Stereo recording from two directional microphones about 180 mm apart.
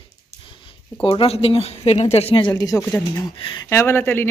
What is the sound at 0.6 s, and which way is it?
Speech, 30° left (ahead or behind).